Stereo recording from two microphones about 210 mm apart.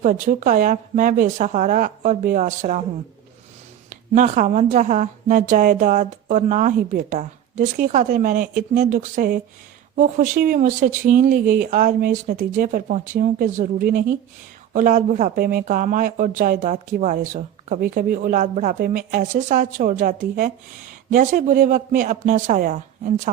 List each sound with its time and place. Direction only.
0.0 s speech: 35° right (ahead or behind)
3.8 s speech: 35° right (ahead or behind)